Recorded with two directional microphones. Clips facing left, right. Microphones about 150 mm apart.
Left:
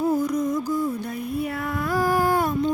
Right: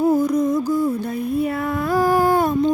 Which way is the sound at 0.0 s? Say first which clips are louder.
Right 5 dB; 25° right (ahead or behind).